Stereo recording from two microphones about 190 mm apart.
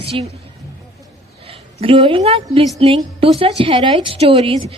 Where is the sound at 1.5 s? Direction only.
30° right (ahead or behind).